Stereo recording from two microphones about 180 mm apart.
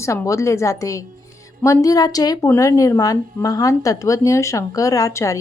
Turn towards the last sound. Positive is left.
turn(degrees=15)  # may be behind; listen again after turning